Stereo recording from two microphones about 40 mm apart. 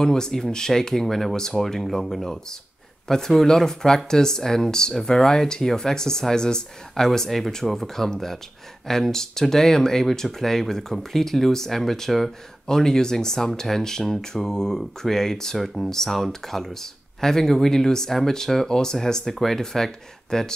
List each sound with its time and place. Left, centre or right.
0.0 s speech: centre
7.1 s speech: centre
15.5 s speech: centre